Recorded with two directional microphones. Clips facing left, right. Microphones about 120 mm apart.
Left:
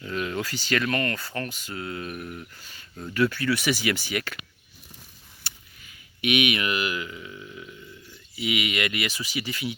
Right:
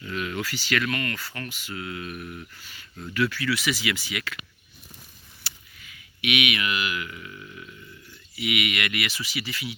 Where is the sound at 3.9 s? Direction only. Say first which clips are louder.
Left 3 dB; 35° left (ahead or behind).